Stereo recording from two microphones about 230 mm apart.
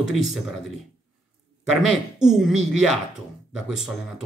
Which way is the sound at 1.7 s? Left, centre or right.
Centre.